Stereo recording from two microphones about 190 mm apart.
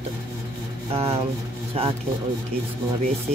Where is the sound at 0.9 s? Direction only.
30° right (ahead or behind).